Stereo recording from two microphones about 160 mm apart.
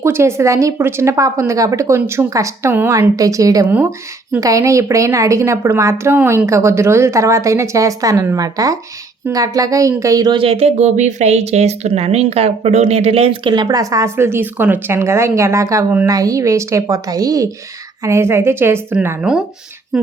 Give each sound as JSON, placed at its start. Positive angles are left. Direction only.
{"t": 0.0, "sound": "speech", "side_deg": -15}
{"t": 3.7, "sound": "speech", "side_deg": -10}
{"t": 4.4, "sound": "speech", "side_deg": -20}